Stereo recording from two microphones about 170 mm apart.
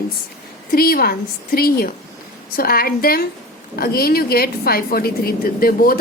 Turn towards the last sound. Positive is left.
turn(degrees=60)  # may be behind; listen again after turning